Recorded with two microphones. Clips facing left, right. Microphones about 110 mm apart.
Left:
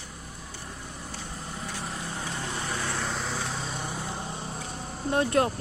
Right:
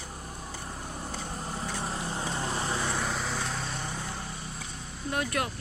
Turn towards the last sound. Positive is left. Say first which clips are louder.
# left 7 dB
turn(degrees=30)  # may be behind; listen again after turning